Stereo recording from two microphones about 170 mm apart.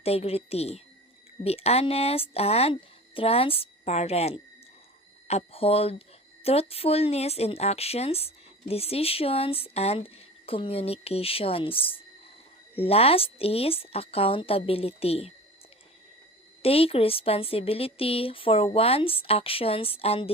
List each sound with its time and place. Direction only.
0.0 s speech: 35° left (ahead or behind)
16.6 s speech: 35° left (ahead or behind)